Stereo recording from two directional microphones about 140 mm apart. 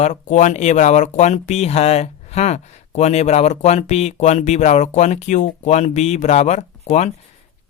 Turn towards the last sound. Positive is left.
turn(degrees=55)  # may be behind; listen again after turning